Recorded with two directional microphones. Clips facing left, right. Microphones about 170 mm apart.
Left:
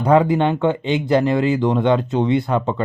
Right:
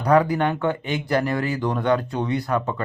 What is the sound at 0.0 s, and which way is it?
Speech, 25° left (ahead or behind).